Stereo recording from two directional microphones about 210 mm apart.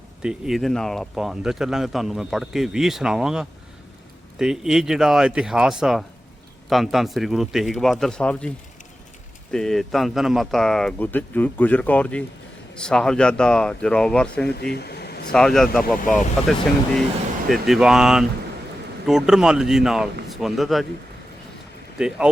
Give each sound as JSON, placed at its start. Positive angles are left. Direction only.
{"t": 0.2, "sound": "speech", "side_deg": -5}
{"t": 14.5, "sound": "air conditioning", "side_deg": 50}
{"t": 15.3, "sound": "speech", "side_deg": 5}
{"t": 21.9, "sound": "speech", "side_deg": -5}